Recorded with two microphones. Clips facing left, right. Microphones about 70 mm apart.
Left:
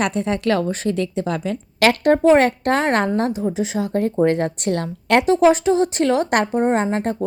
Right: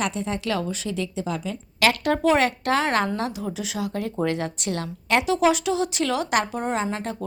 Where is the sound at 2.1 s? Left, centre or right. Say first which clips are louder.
Left 6 dB; left.